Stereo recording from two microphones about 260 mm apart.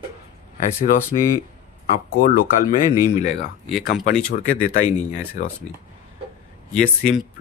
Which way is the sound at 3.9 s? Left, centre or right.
Left.